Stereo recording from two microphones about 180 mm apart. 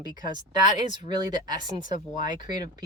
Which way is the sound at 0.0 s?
20° right (ahead or behind).